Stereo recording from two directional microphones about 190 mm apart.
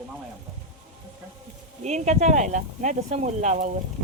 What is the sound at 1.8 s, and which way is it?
Speech, 35° right (ahead or behind).